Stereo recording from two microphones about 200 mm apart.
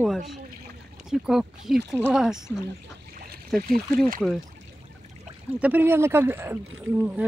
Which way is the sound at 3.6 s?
45° right (ahead or behind).